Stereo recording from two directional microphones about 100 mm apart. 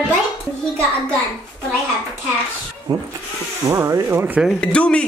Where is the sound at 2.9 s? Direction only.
40° right (ahead or behind).